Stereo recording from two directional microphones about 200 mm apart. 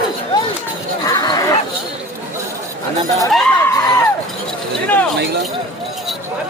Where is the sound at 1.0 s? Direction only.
20° left (ahead or behind).